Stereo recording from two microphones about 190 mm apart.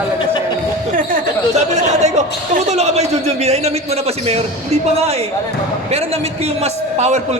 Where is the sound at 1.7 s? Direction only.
35° right (ahead or behind).